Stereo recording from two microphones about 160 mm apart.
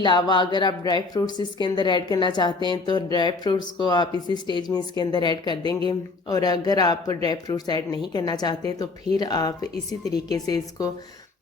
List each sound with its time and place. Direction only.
0.0 s speech: 30° left (ahead or behind)